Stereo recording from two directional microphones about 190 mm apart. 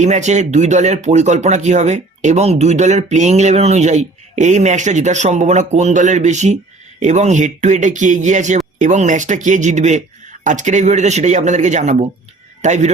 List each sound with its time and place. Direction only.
0.0 s speech: 40° right (ahead or behind)